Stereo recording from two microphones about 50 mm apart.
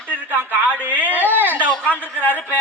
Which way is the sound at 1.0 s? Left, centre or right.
Right.